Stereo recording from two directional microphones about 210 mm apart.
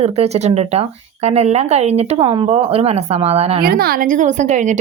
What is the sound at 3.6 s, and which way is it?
Speech, 45° right (ahead or behind).